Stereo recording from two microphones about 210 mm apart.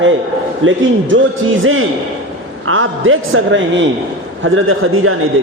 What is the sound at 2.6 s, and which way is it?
A woman's voice, 70° right (ahead or behind).